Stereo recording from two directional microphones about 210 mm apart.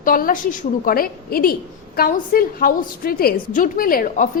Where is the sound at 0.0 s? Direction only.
40° left (ahead or behind).